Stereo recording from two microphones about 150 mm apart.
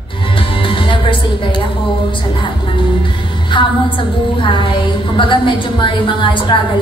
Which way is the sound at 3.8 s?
35° left (ahead or behind).